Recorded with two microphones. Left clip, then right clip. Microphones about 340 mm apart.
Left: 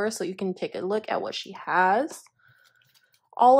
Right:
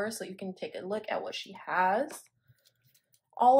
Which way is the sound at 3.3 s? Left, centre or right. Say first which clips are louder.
Left 5 dB; left.